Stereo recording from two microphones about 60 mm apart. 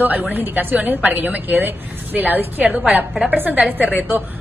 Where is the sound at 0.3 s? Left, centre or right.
Right.